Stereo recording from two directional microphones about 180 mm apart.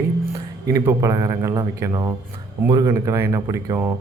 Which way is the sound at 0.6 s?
15° right (ahead or behind).